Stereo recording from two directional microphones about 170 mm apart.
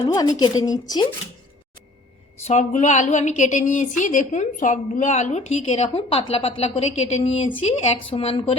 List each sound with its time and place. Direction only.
0.0 s a woman's voice: 20° left (ahead or behind)
2.4 s a woman's voice: 45° left (ahead or behind)